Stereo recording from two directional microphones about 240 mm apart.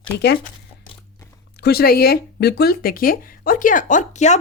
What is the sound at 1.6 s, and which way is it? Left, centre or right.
Speech, left.